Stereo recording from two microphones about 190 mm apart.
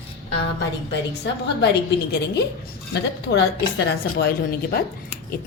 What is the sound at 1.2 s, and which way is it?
A woman's voice, 60° left (ahead or behind).